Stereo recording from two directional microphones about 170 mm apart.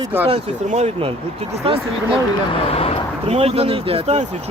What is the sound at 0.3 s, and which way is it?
Speech, 40° right (ahead or behind).